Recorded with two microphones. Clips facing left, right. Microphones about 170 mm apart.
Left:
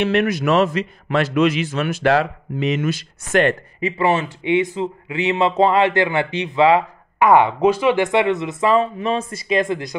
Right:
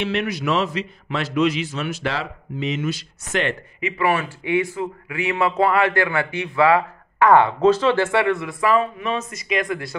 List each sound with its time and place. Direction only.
0.0 s a man's voice: 50° left (ahead or behind)
3.8 s speech: 25° left (ahead or behind)